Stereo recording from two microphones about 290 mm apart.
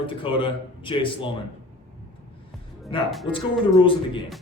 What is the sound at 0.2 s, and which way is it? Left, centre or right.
Speech, centre.